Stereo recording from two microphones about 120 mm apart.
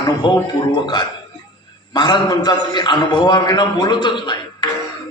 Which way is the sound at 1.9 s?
35° left (ahead or behind).